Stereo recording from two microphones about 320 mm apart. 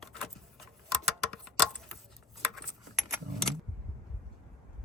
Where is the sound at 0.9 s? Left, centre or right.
Centre.